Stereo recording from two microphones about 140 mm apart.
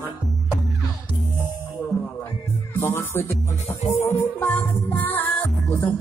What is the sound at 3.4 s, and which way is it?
Music, 55° left (ahead or behind).